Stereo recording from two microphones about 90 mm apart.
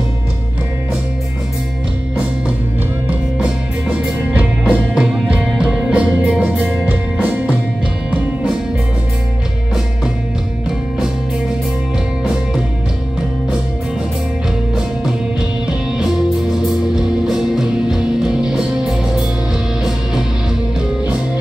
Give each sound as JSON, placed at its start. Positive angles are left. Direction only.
{"t": 3.1, "sound": "music", "side_deg": -10}
{"t": 17.3, "sound": "music", "side_deg": -5}